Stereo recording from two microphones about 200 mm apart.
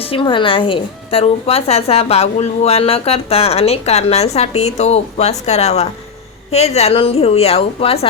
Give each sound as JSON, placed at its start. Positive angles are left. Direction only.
{"t": 0.0, "sound": "a woman's voice", "side_deg": 25}